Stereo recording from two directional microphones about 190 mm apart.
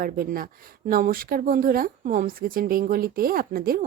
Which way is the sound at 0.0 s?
50° right (ahead or behind).